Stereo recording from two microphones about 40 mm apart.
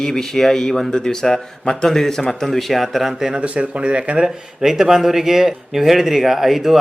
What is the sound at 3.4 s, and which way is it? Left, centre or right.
Speech, right.